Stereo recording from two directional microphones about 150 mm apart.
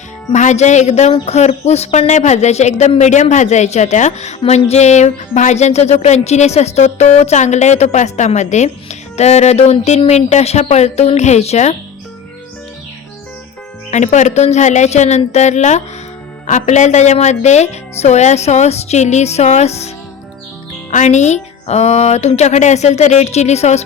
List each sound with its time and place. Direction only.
0.3 s a woman's voice: 50° left (ahead or behind)
13.9 s a woman's voice: 50° left (ahead or behind)
20.9 s a woman's voice: 50° left (ahead or behind)